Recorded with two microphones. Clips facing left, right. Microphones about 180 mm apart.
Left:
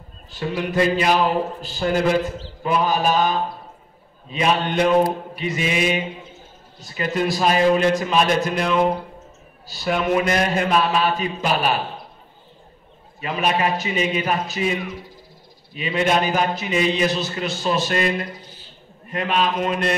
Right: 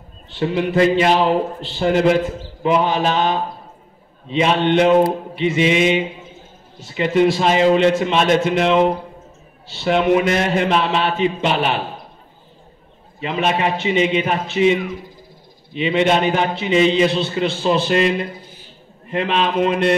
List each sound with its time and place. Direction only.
0.3 s a man's voice: 25° right (ahead or behind)
13.2 s a man's voice: 25° right (ahead or behind)
15.7 s a man's voice: 25° right (ahead or behind)
19.0 s a man's voice: 25° right (ahead or behind)